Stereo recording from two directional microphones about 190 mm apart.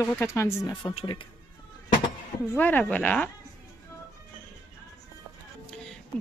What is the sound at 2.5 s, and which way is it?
Speech, 10° left (ahead or behind).